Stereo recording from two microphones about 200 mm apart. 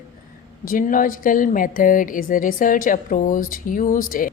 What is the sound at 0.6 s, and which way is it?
A woman's voice, 45° left (ahead or behind).